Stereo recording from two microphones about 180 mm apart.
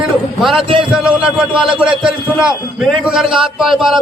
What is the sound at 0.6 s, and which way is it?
Speech, 30° right (ahead or behind).